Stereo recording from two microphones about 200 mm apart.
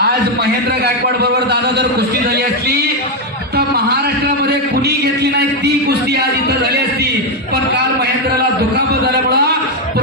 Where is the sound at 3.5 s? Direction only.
55° right (ahead or behind).